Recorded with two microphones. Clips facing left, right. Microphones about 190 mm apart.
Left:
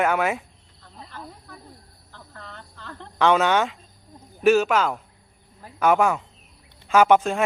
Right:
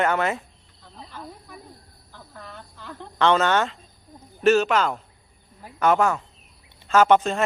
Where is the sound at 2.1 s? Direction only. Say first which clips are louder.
Right 1 dB; 10° right (ahead or behind).